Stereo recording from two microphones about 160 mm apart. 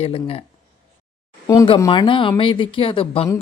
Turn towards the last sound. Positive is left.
turn(degrees=35)  # may be behind; listen again after turning